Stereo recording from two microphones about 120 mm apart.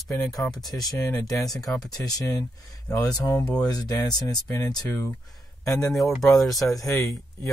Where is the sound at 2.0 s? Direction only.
30° left (ahead or behind).